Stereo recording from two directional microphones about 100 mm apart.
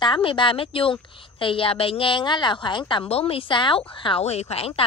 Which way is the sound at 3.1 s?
75° left (ahead or behind).